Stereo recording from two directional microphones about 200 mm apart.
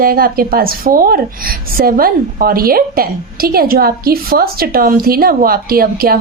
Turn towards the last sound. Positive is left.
turn(degrees=-45)  # may be behind; listen again after turning